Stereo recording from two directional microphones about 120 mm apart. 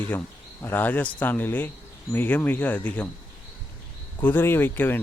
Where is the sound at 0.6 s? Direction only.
15° left (ahead or behind).